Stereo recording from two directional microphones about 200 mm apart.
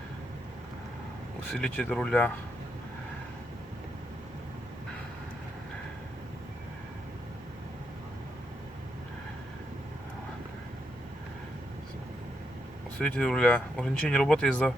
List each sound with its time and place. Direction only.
1.5 s speech: 5° left (ahead or behind)
13.0 s speech: 5° left (ahead or behind)